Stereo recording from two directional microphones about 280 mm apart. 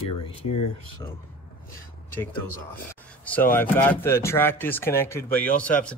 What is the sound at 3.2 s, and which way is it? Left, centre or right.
Speech, centre.